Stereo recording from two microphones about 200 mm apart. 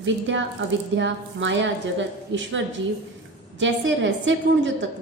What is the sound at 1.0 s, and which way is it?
Speech, 65° right (ahead or behind).